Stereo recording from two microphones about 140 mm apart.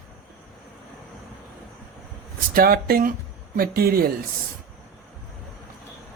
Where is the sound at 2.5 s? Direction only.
90° right.